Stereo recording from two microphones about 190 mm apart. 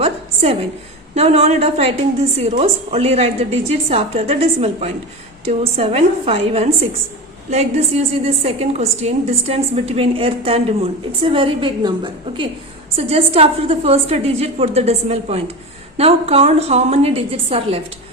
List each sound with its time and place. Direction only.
1.1 s a woman's voice: 35° right (ahead or behind)